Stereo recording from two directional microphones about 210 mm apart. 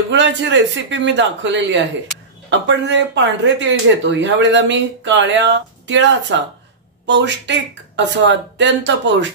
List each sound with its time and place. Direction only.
0.1 s speech: 60° right (ahead or behind)